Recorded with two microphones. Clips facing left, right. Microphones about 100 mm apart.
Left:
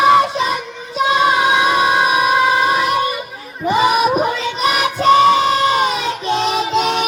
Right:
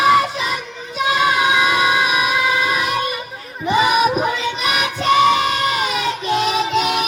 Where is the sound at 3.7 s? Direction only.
35° left (ahead or behind).